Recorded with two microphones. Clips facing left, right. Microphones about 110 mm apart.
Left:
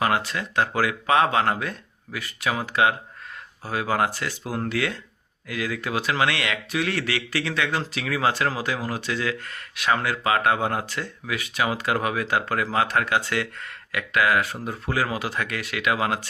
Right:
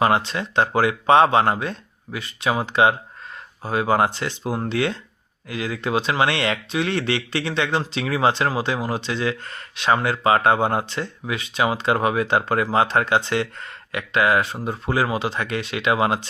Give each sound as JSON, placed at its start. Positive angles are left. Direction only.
{"t": 0.3, "sound": "speech", "side_deg": -25}